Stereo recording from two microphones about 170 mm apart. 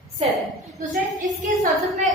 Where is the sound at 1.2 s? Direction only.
50° right (ahead or behind).